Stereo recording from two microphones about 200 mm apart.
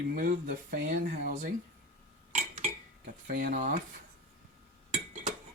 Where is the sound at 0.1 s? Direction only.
45° right (ahead or behind).